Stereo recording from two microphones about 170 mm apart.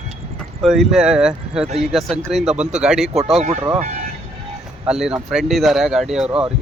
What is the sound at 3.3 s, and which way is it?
Speech, 40° right (ahead or behind).